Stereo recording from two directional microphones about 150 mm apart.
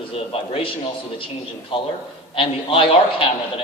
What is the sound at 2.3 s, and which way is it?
A man's voice, 35° left (ahead or behind).